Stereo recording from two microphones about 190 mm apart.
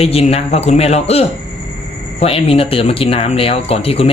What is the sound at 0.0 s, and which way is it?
Speech, 30° left (ahead or behind).